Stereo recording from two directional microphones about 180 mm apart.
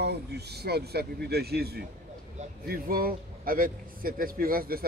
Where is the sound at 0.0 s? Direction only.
65° right (ahead or behind).